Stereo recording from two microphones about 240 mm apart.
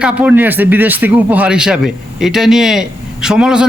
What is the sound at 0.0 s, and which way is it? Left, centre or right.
A man's voice, centre.